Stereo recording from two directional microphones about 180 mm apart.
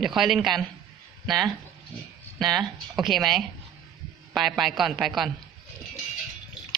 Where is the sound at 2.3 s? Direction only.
Centre (ahead or behind).